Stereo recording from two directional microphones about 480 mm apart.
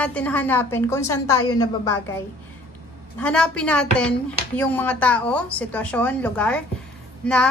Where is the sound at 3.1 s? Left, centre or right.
Centre.